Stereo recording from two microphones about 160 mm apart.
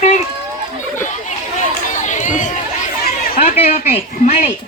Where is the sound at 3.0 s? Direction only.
70° left (ahead or behind).